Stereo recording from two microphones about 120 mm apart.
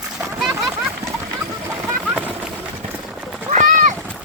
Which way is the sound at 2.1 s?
15° right (ahead or behind).